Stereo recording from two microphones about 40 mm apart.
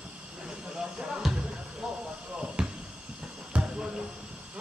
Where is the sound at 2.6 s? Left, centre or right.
Right.